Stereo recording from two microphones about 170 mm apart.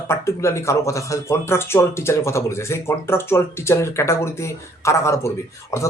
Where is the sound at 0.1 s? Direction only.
15° left (ahead or behind).